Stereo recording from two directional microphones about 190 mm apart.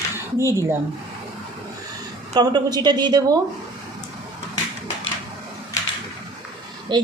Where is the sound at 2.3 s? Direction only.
20° right (ahead or behind).